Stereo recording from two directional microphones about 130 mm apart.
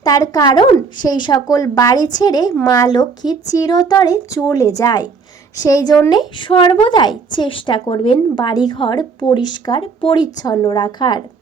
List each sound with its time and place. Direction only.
0.0 s a woman's voice: 30° left (ahead or behind)